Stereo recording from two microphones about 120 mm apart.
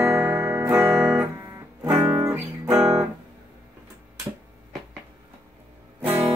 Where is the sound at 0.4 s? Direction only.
25° right (ahead or behind); by 3.1 s 5° right (ahead or behind).